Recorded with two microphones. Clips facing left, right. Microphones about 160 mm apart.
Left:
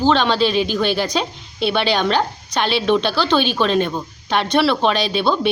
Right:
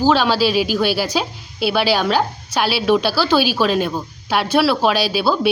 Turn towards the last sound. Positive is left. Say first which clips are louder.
# right 1 dB
turn(degrees=-5)  # may be behind; listen again after turning